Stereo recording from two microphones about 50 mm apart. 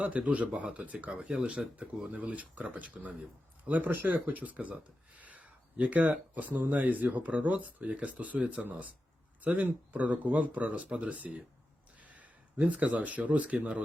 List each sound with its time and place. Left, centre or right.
0.0 s speech: right